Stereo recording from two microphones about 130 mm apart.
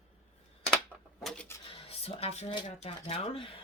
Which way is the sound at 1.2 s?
5° left (ahead or behind).